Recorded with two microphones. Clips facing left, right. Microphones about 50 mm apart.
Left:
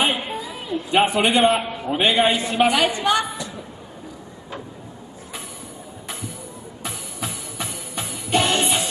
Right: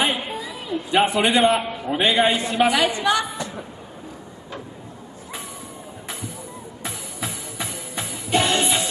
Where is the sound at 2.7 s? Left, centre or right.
Left.